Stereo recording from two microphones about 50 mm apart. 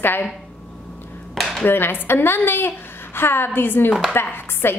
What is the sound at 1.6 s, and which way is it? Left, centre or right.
A woman's voice, left.